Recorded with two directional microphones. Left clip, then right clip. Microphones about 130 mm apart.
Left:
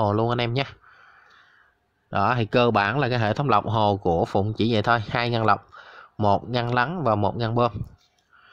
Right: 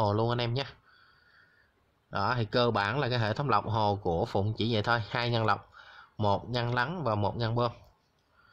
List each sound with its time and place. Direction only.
0.0 s a man's voice: 30° left (ahead or behind)
2.0 s a man's voice: 45° left (ahead or behind)